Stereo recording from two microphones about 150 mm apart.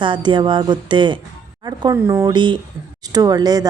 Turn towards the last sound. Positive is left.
turn(degrees=-25)  # may be behind; listen again after turning